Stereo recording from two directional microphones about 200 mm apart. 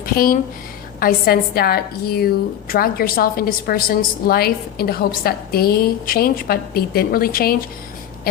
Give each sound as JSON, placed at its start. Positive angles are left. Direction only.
{"t": 0.0, "sound": "a woman's voice", "side_deg": 45}